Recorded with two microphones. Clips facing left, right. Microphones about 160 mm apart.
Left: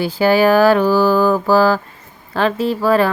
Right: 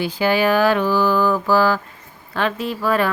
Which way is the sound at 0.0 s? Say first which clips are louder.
Left 5 dB; 40° left (ahead or behind).